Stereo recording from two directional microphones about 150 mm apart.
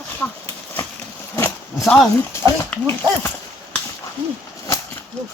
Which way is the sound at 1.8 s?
Centre (ahead or behind).